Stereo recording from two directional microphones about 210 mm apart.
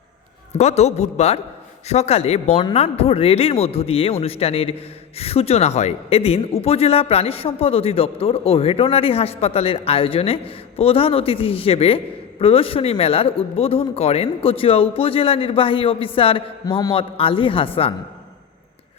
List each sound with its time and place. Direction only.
0.5 s a man's voice: 30° left (ahead or behind)